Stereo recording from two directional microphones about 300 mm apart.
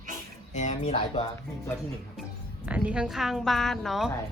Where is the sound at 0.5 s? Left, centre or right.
Left.